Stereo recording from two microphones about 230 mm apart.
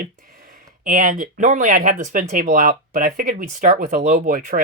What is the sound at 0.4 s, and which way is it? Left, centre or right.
Speech, right.